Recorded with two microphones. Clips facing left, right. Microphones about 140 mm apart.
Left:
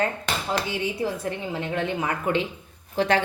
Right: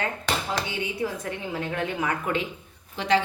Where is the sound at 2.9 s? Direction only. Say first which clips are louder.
Left 1 dB; 50° left (ahead or behind).